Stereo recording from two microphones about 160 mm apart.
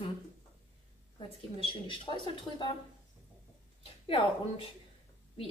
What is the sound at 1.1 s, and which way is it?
Speech, 30° left (ahead or behind).